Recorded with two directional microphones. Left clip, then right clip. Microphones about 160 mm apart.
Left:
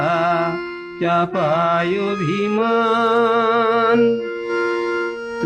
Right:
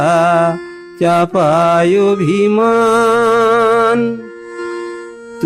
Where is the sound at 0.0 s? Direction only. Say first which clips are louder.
Right 7 dB; 60° right (ahead or behind).